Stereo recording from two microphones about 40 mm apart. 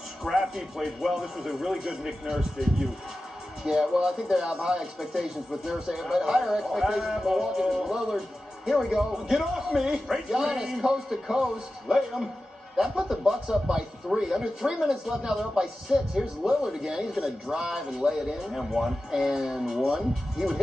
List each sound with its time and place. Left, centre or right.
0.4 s a man's voice: centre